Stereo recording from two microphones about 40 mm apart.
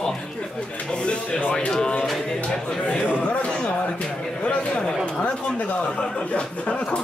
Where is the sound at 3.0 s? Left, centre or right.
Left.